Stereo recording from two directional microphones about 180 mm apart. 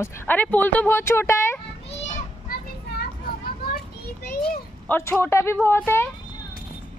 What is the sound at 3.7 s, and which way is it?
Children playing, 60° left (ahead or behind).